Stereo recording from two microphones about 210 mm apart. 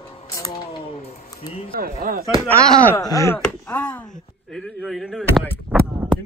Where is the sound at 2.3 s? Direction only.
15° left (ahead or behind).